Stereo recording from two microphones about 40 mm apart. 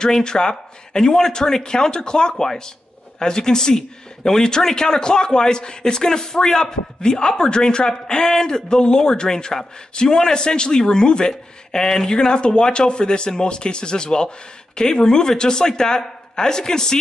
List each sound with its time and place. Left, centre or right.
0.0 s a man's voice: centre